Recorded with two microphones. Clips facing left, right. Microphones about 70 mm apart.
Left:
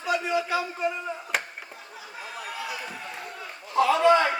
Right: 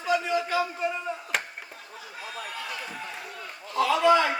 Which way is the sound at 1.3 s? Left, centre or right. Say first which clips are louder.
Left 1 dB; centre.